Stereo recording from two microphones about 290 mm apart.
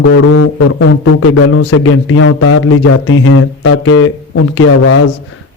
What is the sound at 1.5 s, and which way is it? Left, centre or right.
Speech, left.